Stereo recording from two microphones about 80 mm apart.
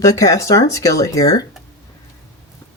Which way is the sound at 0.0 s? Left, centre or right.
Left.